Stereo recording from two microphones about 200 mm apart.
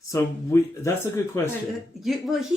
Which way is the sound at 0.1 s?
15° left (ahead or behind).